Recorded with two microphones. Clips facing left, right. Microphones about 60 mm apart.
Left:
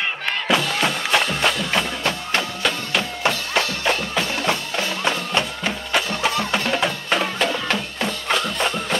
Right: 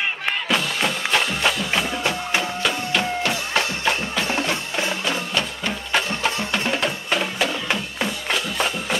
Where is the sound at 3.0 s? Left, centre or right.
Right.